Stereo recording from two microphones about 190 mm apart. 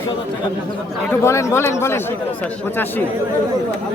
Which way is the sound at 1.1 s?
15° left (ahead or behind).